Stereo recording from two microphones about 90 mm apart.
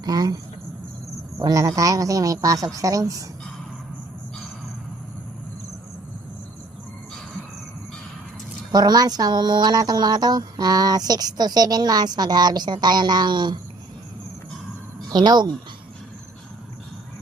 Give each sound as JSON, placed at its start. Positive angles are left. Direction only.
{"t": 0.0, "sound": "speech", "side_deg": -45}
{"t": 1.4, "sound": "speech", "side_deg": -40}
{"t": 8.7, "sound": "speech", "side_deg": -45}
{"t": 15.1, "sound": "speech", "side_deg": -55}